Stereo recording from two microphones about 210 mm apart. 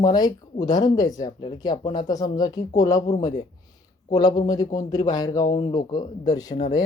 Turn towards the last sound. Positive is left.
turn(degrees=15)  # may be behind; listen again after turning